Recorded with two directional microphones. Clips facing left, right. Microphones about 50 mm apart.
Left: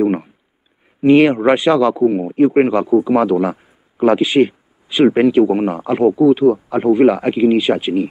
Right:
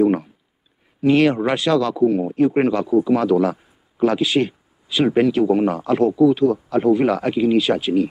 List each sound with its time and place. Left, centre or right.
0.0 s speech: left